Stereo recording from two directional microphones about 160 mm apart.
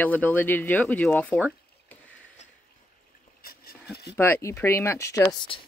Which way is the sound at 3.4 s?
70° left (ahead or behind).